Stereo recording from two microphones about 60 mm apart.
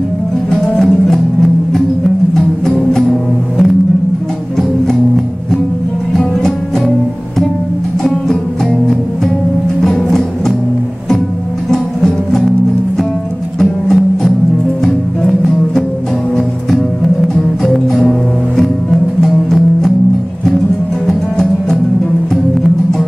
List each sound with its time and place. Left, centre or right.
0.7 s music: centre
9.8 s music: centre
11.7 s music: centre
13.6 s music: centre
17.6 s music: centre
18.6 s music: centre
21.1 s music: centre